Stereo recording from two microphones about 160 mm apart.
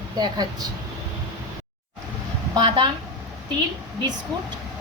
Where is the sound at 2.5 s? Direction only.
30° right (ahead or behind).